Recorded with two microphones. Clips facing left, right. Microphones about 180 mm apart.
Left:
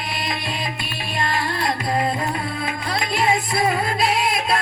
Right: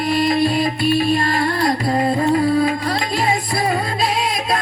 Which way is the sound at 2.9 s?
30° right (ahead or behind).